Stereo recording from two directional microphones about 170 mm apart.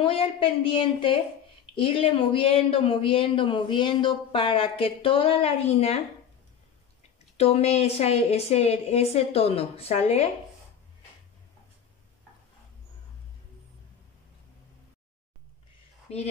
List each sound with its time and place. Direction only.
0.0 s speech: 35° left (ahead or behind)